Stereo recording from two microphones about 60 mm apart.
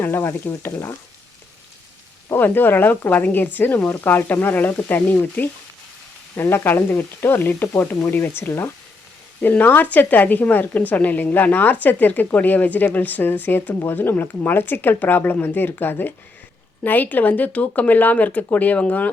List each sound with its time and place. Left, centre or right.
0.0 s speech: left
0.6 s speech: left
2.3 s a woman's voice: left